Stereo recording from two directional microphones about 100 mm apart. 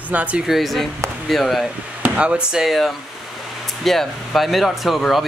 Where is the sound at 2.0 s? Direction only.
10° right (ahead or behind).